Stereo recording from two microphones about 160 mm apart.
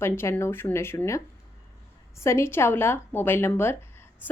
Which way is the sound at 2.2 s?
15° left (ahead or behind).